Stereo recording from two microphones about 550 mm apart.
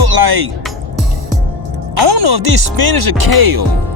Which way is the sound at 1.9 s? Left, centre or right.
Right.